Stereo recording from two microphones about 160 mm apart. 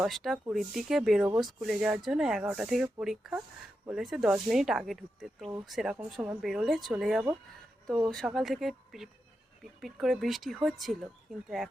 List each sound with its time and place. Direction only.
0.0 s speech: centre (ahead or behind)